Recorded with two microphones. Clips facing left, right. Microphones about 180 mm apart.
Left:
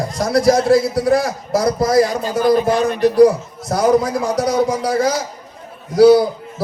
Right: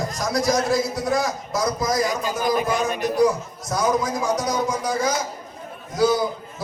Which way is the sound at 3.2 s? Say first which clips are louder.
Left 8 dB; 65° left (ahead or behind).